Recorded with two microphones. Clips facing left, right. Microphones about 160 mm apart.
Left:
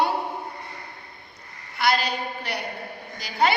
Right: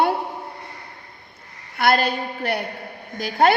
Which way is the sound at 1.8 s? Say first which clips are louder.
Right 4 dB; 50° right (ahead or behind).